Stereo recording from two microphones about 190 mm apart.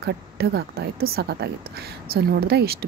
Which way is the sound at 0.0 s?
60° right (ahead or behind).